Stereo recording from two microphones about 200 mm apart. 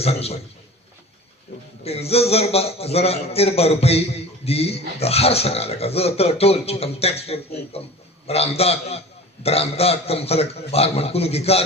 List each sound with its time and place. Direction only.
0.0 s a man's voice: 30° left (ahead or behind)
1.8 s a man's voice: 30° left (ahead or behind)